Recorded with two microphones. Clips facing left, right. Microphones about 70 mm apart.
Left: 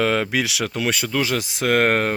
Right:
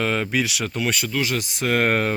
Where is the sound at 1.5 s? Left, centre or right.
Left.